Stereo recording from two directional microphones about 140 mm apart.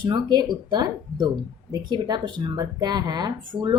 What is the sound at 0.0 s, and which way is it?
A woman's voice, 30° right (ahead or behind).